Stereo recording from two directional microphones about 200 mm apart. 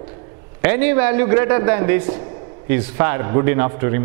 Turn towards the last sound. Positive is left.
turn(degrees=-15)  # may be behind; listen again after turning